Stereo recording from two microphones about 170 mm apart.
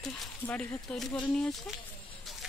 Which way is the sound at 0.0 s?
5° left (ahead or behind).